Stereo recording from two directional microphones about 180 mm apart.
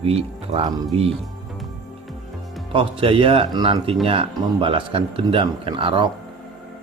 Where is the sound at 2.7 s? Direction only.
30° right (ahead or behind).